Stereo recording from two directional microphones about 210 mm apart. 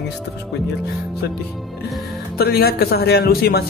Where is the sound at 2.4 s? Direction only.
50° left (ahead or behind).